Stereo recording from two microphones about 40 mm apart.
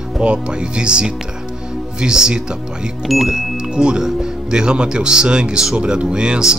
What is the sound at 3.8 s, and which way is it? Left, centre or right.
Speech, right.